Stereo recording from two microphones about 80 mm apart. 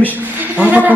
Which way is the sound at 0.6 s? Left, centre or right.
Right.